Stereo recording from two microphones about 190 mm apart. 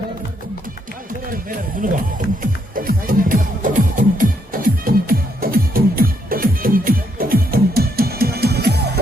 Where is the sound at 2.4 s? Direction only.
50° right (ahead or behind).